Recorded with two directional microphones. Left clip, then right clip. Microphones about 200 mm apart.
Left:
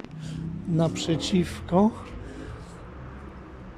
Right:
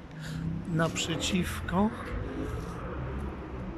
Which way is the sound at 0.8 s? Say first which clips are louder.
Left 3 dB; 25° left (ahead or behind).